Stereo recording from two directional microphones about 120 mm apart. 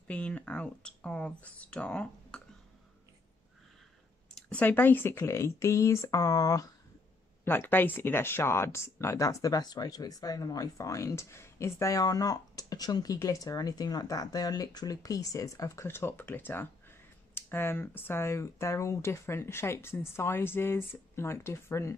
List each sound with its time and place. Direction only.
0.1 s speech: 10° left (ahead or behind)
4.4 s speech: 10° left (ahead or behind); by 6.6 s 30° left (ahead or behind)
7.4 s speech: 15° left (ahead or behind)